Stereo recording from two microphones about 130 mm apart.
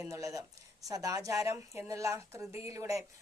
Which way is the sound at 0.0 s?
25° right (ahead or behind).